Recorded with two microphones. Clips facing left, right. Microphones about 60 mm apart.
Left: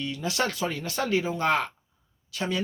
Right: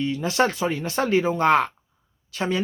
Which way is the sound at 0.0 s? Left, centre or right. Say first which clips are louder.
Right 7 dB; right.